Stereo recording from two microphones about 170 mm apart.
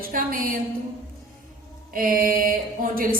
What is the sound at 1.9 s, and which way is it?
A woman's voice, 55° right (ahead or behind).